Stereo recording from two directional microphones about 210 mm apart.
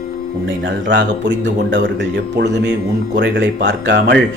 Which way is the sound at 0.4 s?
55° right (ahead or behind).